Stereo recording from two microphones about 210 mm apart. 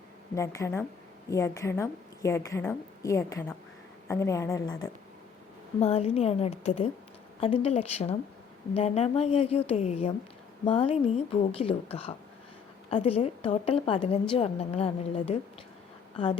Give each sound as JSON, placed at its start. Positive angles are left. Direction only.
{"t": 0.3, "sound": "a woman's voice", "side_deg": 15}
{"t": 5.8, "sound": "a woman's voice", "side_deg": 30}